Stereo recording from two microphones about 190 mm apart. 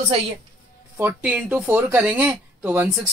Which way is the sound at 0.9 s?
10° right (ahead or behind).